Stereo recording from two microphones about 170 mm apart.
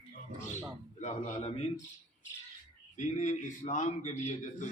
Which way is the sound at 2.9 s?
45° left (ahead or behind).